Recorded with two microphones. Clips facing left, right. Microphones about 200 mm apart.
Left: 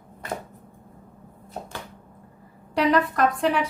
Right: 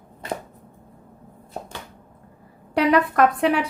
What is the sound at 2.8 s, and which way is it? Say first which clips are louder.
Speech: right 3 dB; 60° right (ahead or behind).